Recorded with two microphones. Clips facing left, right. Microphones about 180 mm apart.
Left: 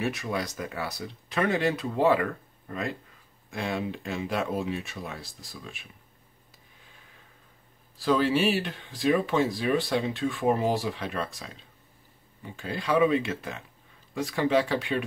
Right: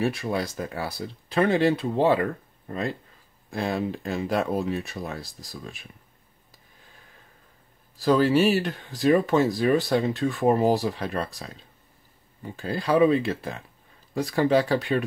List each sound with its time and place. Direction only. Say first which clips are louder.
0.0 s speech: right 4 dB; 30° right (ahead or behind)
3.4 s speech: right 4 dB; 35° right (ahead or behind)
8.0 s speech: right 4 dB; 40° right (ahead or behind)
12.5 s speech: right 3 dB; 35° right (ahead or behind)